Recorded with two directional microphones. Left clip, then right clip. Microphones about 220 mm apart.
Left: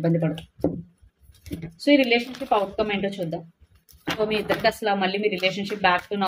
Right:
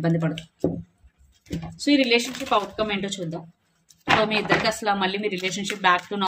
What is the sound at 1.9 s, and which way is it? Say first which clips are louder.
Speech: left 1 dB; 20° right (ahead or behind).